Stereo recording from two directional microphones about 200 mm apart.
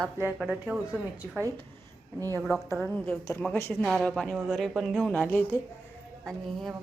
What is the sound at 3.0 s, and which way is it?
Speech, 10° left (ahead or behind).